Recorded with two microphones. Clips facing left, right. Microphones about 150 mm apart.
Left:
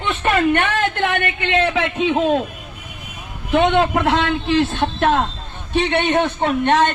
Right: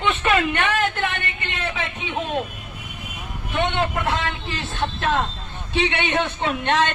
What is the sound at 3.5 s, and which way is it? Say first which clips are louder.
A man's voice: left 8 dB; 90° left.